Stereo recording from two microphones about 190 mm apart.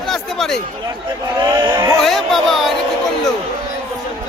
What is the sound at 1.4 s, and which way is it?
Speech, 20° right (ahead or behind).